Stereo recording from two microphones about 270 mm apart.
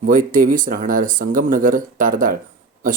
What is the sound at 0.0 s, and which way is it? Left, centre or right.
Speech, right.